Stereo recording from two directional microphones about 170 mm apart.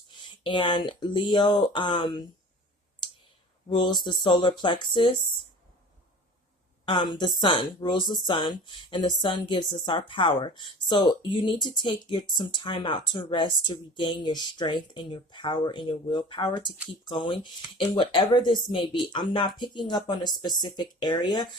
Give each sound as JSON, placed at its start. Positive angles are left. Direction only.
{"t": 0.2, "sound": "speech", "side_deg": 30}
{"t": 3.7, "sound": "speech", "side_deg": 25}
{"t": 6.8, "sound": "speech", "side_deg": 25}